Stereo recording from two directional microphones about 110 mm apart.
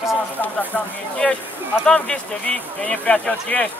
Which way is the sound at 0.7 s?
10° left (ahead or behind).